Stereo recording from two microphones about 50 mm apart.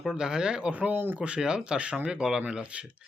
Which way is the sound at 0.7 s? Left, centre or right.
Right.